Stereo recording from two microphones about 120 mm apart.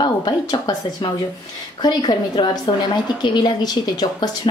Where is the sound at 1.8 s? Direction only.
40° left (ahead or behind).